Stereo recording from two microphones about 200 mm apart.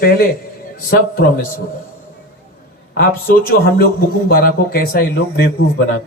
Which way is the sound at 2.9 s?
45° left (ahead or behind).